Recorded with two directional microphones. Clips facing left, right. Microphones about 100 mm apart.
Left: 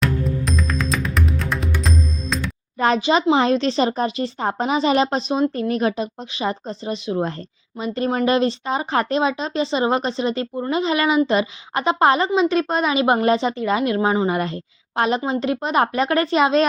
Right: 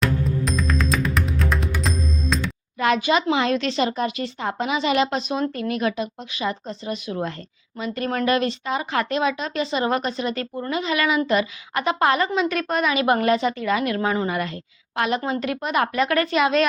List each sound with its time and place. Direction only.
0.0 s music: centre (ahead or behind)
2.7 s a woman's voice: 35° left (ahead or behind)